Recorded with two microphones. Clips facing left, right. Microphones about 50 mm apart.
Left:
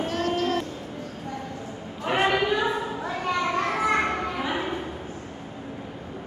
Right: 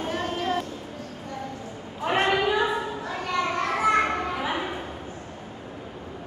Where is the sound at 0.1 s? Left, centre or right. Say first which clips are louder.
Left 1 dB; centre.